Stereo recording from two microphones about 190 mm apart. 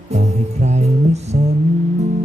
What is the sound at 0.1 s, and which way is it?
Music, 35° right (ahead or behind).